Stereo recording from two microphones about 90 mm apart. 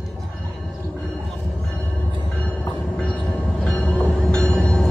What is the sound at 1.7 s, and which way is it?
Train, 20° left (ahead or behind).